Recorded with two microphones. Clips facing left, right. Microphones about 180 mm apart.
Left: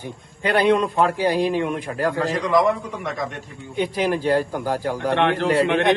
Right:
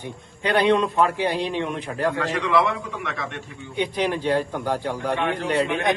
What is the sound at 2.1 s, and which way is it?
A man's voice, 35° left (ahead or behind).